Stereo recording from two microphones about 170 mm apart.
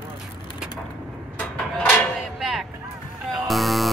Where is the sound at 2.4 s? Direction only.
Centre (ahead or behind).